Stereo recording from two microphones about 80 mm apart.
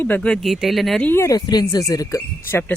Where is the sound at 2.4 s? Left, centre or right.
Left.